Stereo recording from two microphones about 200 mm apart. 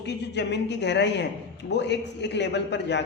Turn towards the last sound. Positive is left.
turn(degrees=60)  # may be behind; listen again after turning